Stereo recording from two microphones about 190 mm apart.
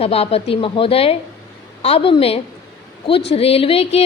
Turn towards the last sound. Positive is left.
turn(degrees=30)  # may be behind; listen again after turning